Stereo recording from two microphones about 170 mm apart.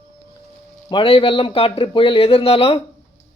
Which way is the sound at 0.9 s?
30° left (ahead or behind).